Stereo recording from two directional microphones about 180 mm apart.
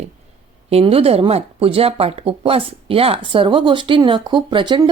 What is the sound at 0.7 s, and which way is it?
Speech, 30° right (ahead or behind).